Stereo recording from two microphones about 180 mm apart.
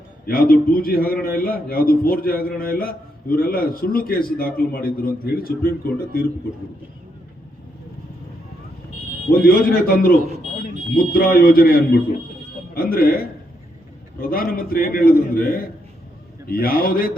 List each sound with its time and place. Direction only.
0.3 s a man's voice: 55° left (ahead or behind)
9.4 s a man's voice: 55° left (ahead or behind)